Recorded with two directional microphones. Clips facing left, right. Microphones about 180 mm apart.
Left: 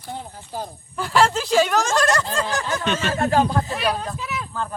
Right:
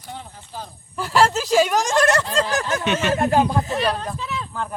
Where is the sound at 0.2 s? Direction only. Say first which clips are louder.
Left 4 dB; 45° left (ahead or behind).